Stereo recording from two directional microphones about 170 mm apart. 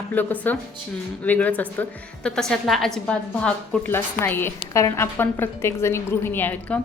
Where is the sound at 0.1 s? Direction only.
10° left (ahead or behind).